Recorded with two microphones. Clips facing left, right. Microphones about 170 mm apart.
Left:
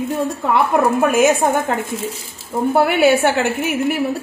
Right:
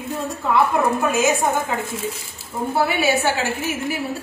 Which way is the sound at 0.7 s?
55° left (ahead or behind).